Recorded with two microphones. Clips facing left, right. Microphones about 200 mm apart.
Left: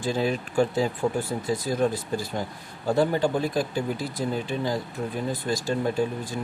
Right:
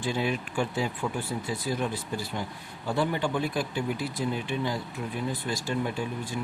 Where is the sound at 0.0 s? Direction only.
40° left (ahead or behind).